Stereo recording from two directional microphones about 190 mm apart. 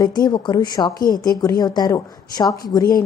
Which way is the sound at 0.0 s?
20° left (ahead or behind).